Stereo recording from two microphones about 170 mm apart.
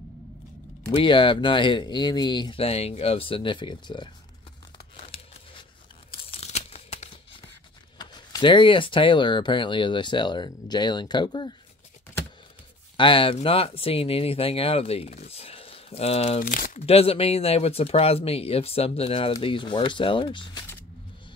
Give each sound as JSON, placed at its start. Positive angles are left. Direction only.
{"t": 0.9, "sound": "speech", "side_deg": 30}
{"t": 4.9, "sound": "tearing", "side_deg": 35}
{"t": 8.0, "sound": "speech", "side_deg": 25}
{"t": 12.9, "sound": "speech", "side_deg": 30}
{"t": 16.8, "sound": "speech", "side_deg": 35}